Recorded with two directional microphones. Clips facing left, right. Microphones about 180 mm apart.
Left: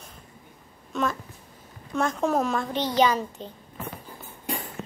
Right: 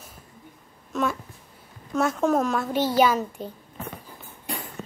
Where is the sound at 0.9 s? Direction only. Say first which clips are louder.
Right 1 dB; centre (ahead or behind).